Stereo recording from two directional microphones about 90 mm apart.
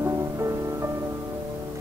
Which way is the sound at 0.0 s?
35° right (ahead or behind).